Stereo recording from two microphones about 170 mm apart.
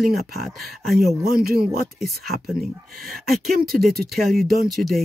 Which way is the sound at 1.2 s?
60° right (ahead or behind).